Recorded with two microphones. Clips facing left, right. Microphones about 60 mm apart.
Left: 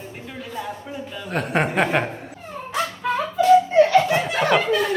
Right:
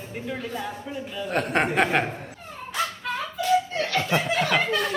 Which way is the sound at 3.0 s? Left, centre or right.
Left.